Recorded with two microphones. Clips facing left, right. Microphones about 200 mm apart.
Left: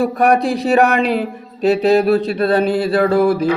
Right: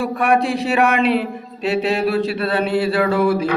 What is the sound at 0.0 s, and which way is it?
Speech, 40° left (ahead or behind).